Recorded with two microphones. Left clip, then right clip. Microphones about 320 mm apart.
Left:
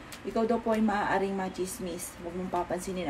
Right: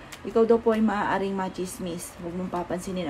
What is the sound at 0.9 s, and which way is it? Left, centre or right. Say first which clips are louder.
Speech: right 2 dB; right.